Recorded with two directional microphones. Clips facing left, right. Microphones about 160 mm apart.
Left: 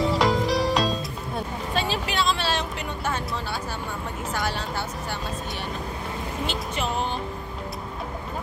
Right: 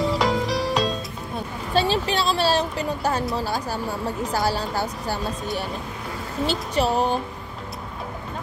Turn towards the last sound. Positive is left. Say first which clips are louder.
# right 6 dB
turn(degrees=-40)  # may be behind; listen again after turning